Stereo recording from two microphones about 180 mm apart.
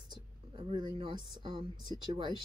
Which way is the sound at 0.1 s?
25° right (ahead or behind).